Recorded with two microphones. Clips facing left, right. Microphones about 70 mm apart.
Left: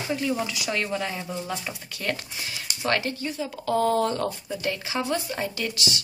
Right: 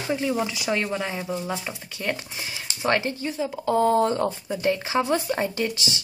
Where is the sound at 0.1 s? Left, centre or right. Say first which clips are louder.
Right 2 dB; centre.